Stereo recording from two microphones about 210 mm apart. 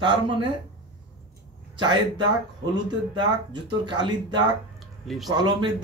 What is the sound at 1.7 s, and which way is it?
A man's voice, 20° right (ahead or behind).